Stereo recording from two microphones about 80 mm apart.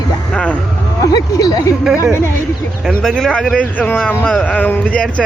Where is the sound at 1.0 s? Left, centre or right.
Left.